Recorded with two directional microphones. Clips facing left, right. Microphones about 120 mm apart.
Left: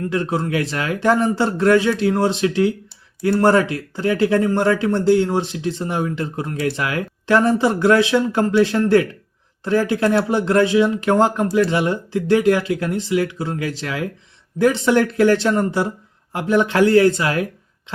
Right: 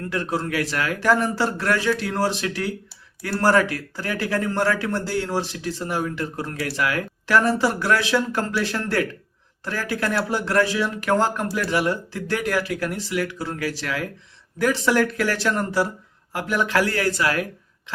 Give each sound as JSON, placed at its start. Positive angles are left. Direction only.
{"t": 0.1, "sound": "speech", "side_deg": 20}